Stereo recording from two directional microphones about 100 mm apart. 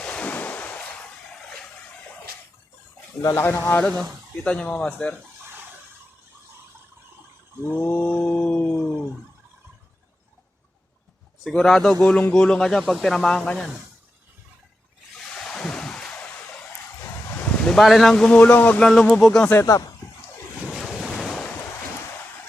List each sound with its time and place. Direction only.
0.0 s ocean: 10° left (ahead or behind)
3.2 s speech: 30° left (ahead or behind)
4.4 s speech: 10° left (ahead or behind)
7.7 s a sound: 15° left (ahead or behind)
11.4 s speech: 5° left (ahead or behind)
15.4 s a sound: 5° left (ahead or behind)
17.7 s speech: centre (ahead or behind)
19.6 s speech: 35° left (ahead or behind)
20.7 s waves: centre (ahead or behind)